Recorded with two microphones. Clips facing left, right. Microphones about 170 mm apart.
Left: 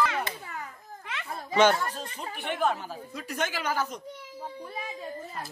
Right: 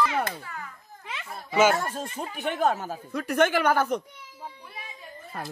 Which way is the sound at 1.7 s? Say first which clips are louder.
Right 3 dB; 45° right (ahead or behind).